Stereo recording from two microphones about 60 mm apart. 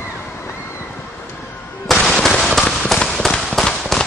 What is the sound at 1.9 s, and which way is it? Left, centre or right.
Firecracker, centre.